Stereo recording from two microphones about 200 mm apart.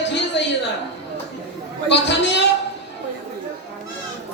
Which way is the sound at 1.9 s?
60° left (ahead or behind).